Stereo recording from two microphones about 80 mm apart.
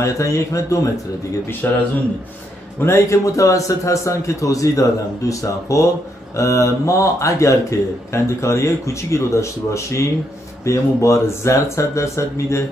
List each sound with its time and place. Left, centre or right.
0.0 s speech: left
1.6 s speech: centre
2.8 s speech: left